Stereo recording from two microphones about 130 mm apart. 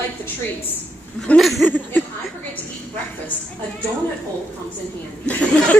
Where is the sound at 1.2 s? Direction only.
5° left (ahead or behind).